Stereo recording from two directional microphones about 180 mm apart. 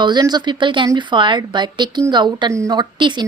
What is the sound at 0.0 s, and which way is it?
Speech, 25° right (ahead or behind).